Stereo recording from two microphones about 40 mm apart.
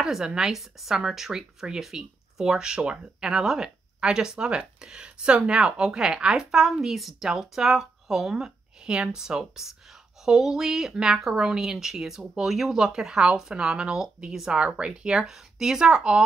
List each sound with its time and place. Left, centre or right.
0.0 s speech: centre
8.8 s speech: right
15.2 s speech: centre
16.0 s speech: right